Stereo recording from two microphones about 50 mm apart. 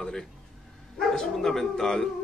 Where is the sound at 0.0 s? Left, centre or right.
Centre.